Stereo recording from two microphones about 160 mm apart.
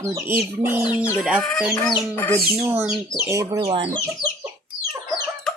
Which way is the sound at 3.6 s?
30° right (ahead or behind).